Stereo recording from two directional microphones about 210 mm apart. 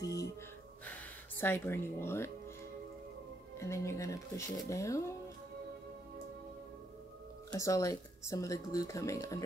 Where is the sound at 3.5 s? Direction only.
15° left (ahead or behind).